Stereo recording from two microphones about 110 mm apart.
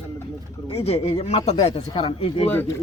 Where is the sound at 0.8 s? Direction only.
70° left (ahead or behind).